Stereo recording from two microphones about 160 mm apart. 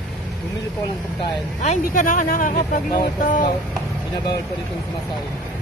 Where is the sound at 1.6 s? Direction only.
55° left (ahead or behind).